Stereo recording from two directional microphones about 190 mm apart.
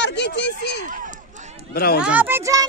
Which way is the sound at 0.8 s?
45° right (ahead or behind).